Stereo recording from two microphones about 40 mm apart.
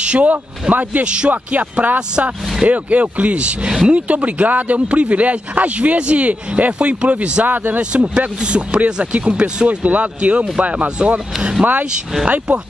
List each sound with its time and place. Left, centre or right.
0.0 s speech: right
1.0 s speech: right
2.0 s speech: right
2.6 s speech: right
7.4 s speech: right
7.9 s speech: right